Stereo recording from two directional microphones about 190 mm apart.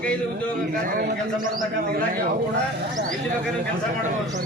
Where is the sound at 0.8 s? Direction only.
45° right (ahead or behind).